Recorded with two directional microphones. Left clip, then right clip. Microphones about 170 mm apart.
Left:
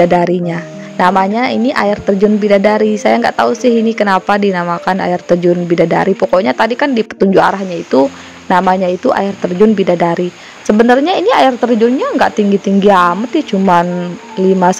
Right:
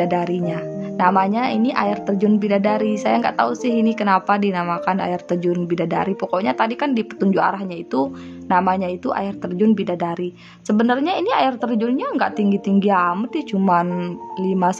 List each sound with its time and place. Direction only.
0.0 s speech: 35° left (ahead or behind)